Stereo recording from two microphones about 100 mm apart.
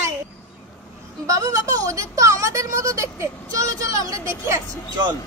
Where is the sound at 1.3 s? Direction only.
35° right (ahead or behind).